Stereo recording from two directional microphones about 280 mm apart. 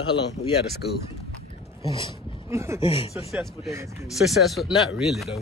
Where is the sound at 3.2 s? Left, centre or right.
Centre.